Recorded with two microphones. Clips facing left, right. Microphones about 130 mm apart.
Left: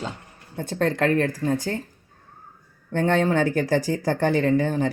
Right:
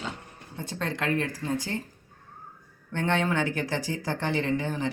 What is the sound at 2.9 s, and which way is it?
Speech, 40° left (ahead or behind).